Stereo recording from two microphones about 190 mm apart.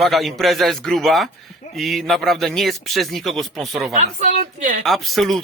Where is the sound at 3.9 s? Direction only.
40° right (ahead or behind).